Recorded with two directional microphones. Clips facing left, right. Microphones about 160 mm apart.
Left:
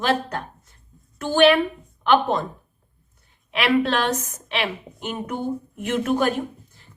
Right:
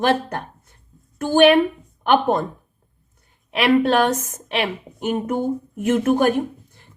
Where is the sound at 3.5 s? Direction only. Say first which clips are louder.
Right 4 dB; 45° right (ahead or behind).